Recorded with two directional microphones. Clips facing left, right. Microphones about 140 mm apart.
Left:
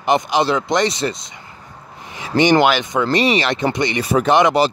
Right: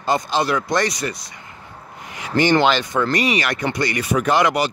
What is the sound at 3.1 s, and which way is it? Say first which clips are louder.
Speech: left 4 dB; 30° left (ahead or behind).